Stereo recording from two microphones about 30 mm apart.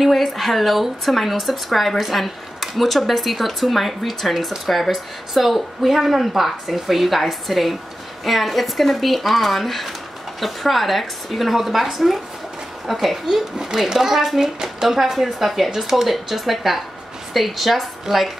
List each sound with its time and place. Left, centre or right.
0.0 s speech: centre
13.6 s a child's voice: centre